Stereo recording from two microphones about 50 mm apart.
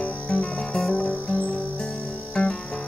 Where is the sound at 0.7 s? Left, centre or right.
Centre.